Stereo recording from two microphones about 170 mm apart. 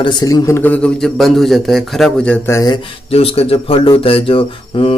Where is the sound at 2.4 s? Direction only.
15° left (ahead or behind).